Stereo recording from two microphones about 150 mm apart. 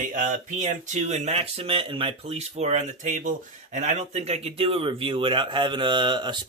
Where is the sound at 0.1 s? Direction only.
60° right (ahead or behind).